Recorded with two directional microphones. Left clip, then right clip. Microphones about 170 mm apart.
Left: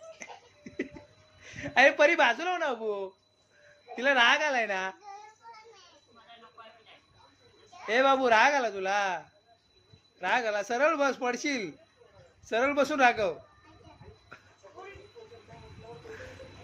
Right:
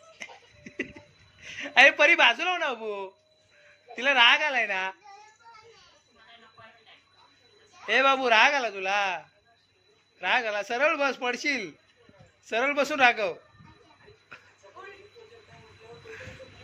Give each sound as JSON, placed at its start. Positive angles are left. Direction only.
{"t": 0.2, "sound": "cough", "side_deg": 5}
{"t": 1.4, "sound": "a woman's voice", "side_deg": 10}
{"t": 7.9, "sound": "a man's voice", "side_deg": 15}